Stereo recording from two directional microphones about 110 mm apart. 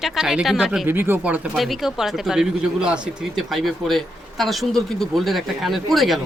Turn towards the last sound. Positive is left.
turn(degrees=0)  # may be behind; listen again after turning